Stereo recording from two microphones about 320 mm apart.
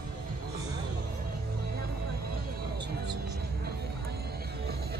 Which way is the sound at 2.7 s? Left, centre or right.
Right.